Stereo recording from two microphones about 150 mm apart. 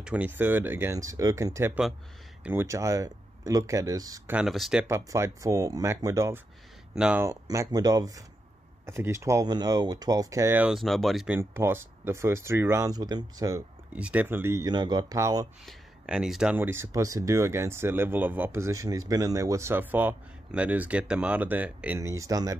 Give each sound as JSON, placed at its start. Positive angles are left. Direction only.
{"t": 0.0, "sound": "speech", "side_deg": -10}
{"t": 4.3, "sound": "speech", "side_deg": -5}
{"t": 4.8, "sound": "speech", "side_deg": -20}
{"t": 7.0, "sound": "speech", "side_deg": -10}
{"t": 7.2, "sound": "speech", "side_deg": -25}
{"t": 11.2, "sound": "speech", "side_deg": -15}
{"t": 13.9, "sound": "speech", "side_deg": -10}
{"t": 15.6, "sound": "speech", "side_deg": -5}